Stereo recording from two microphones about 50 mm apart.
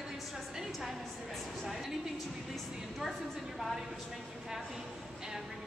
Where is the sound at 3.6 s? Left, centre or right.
Centre.